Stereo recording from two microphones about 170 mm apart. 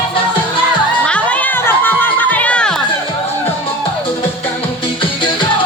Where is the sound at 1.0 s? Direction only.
5° left (ahead or behind).